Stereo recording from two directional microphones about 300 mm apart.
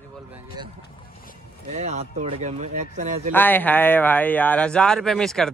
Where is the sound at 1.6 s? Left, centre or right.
Right.